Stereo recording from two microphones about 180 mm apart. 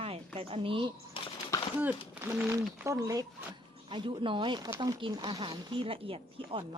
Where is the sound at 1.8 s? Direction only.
15° right (ahead or behind).